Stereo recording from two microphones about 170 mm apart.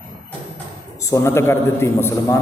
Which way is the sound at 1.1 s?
15° left (ahead or behind).